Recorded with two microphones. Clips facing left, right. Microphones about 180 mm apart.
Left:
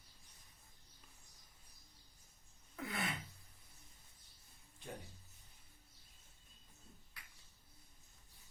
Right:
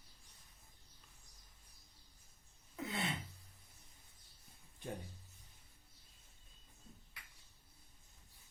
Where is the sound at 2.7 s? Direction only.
25° right (ahead or behind).